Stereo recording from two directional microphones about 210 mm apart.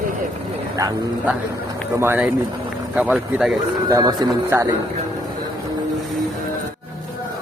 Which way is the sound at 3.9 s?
20° right (ahead or behind).